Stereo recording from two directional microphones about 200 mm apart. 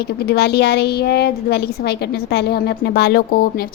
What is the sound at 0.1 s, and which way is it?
A woman's voice, 55° left (ahead or behind).